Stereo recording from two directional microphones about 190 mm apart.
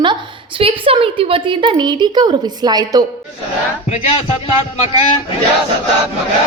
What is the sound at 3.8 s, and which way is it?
Speech, 30° left (ahead or behind).